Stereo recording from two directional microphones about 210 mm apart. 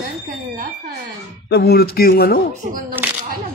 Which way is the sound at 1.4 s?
50° left (ahead or behind).